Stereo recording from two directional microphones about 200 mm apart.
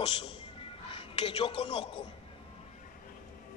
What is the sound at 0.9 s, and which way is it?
A man's voice, 25° left (ahead or behind).